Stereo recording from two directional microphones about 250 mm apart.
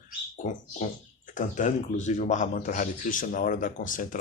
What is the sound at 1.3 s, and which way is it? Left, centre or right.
Speech, left.